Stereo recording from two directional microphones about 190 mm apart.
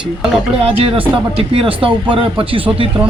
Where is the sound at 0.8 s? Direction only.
30° right (ahead or behind).